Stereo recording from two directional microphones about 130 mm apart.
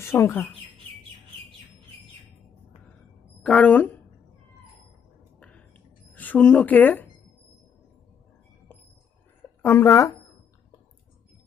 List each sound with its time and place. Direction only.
0.0 s speech: 20° left (ahead or behind)
3.4 s speech: 10° left (ahead or behind)
5.4 s a sound: 10° left (ahead or behind)
9.6 s speech: 20° left (ahead or behind)